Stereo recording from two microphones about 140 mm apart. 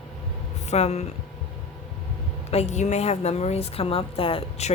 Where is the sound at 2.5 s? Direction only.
50° left (ahead or behind).